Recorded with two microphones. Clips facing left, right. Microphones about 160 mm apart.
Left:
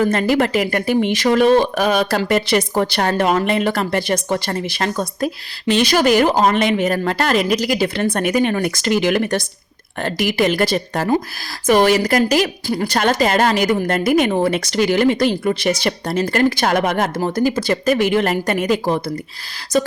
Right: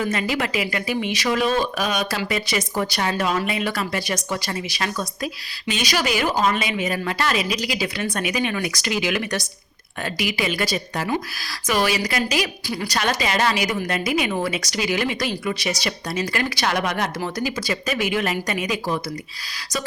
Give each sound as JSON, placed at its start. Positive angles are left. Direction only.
{"t": 0.0, "sound": "speech", "side_deg": 55}